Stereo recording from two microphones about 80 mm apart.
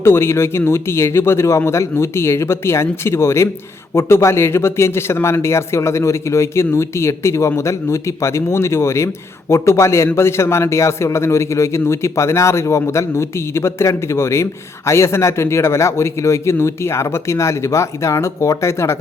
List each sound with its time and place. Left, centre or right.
0.0 s speech: left